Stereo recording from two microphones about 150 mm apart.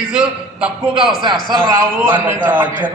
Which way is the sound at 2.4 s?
10° right (ahead or behind).